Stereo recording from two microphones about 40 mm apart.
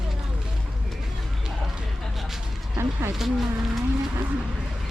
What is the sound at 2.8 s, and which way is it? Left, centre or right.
Speech, right.